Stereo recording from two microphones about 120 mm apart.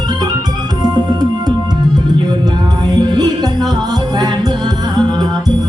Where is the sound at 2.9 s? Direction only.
35° right (ahead or behind).